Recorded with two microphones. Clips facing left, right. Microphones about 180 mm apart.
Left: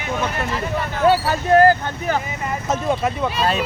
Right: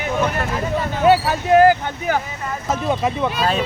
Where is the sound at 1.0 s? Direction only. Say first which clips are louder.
Right 1 dB; 10° right (ahead or behind).